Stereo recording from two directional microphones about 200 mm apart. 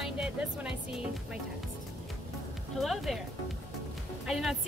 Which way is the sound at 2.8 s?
Centre (ahead or behind).